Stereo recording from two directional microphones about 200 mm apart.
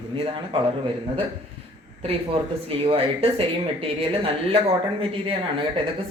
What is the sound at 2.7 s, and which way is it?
Speech, 30° right (ahead or behind).